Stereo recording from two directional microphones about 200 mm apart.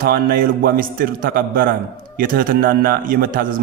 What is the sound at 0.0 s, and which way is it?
A man's voice, 45° right (ahead or behind).